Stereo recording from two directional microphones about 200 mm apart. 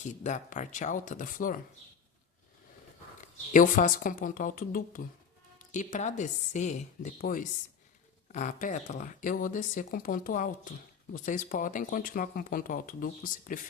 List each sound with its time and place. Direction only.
0.0 s speech: 35° left (ahead or behind)
3.2 s speech: 40° left (ahead or behind)